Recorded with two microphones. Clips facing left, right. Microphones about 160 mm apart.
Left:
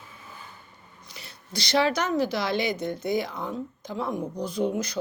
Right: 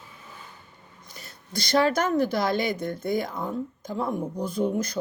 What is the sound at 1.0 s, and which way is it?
Speech, 45° right (ahead or behind).